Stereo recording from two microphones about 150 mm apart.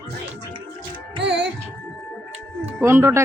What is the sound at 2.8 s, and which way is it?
Speech, 20° right (ahead or behind).